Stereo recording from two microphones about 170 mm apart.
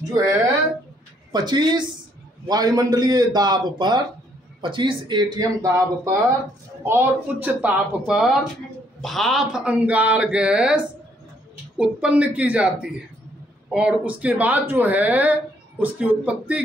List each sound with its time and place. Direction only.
1.3 s speech: 25° right (ahead or behind); by 16.6 s 5° right (ahead or behind)